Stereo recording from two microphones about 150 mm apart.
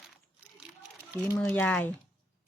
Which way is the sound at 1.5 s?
10° left (ahead or behind).